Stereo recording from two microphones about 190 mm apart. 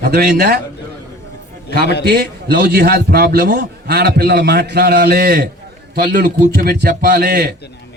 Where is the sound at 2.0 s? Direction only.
55° right (ahead or behind).